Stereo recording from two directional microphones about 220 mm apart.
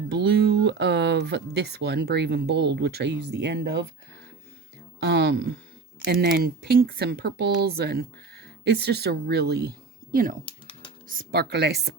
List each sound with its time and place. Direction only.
0.1 s a sound: 50° right (ahead or behind)
1.5 s speech: 50° right (ahead or behind)
4.9 s speech: 50° right (ahead or behind)